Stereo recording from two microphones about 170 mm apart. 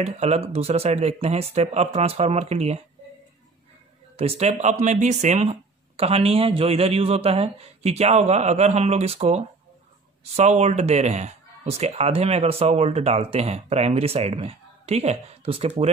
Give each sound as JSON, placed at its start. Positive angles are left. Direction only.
{"t": 0.0, "sound": "speech", "side_deg": -40}
{"t": 4.2, "sound": "speech", "side_deg": -35}